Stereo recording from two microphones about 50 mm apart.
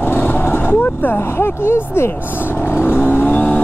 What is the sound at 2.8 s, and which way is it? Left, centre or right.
Vehicle, left.